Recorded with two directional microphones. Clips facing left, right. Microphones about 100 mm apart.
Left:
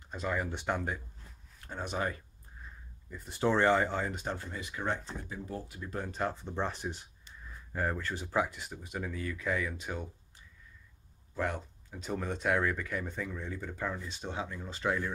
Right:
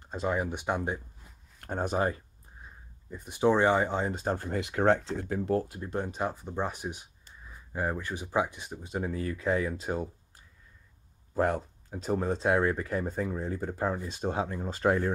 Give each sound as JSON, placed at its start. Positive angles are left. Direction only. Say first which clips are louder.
{"t": 0.0, "sound": "speech", "louder": "right 4 dB", "side_deg": -30}
{"t": 1.6, "sound": "speech", "louder": "right 8 dB", "side_deg": -50}
{"t": 2.0, "sound": "speech", "louder": "right 3 dB", "side_deg": -30}
{"t": 4.4, "sound": "speech", "louder": "right 10 dB", "side_deg": -65}
{"t": 5.7, "sound": "speech", "louder": "right 5 dB", "side_deg": -30}